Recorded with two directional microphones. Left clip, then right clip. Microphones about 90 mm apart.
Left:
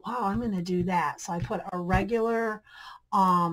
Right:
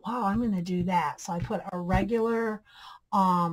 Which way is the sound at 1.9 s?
25° left (ahead or behind).